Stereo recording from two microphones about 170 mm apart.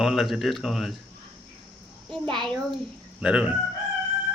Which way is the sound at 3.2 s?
5° right (ahead or behind).